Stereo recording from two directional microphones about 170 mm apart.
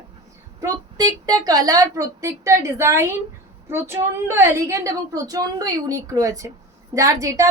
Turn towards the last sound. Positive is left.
turn(degrees=-20)  # may be behind; listen again after turning